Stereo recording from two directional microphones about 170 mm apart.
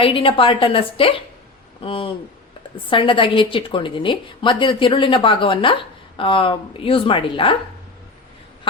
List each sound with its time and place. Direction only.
0.0 s a woman's voice: 30° left (ahead or behind)